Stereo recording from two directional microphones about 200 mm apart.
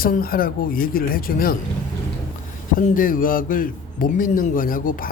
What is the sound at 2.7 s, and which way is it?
Speech, 45° left (ahead or behind).